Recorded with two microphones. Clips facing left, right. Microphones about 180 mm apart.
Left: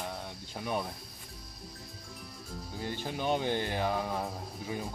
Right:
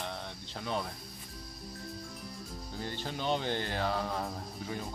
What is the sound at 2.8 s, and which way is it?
Speech, 15° left (ahead or behind).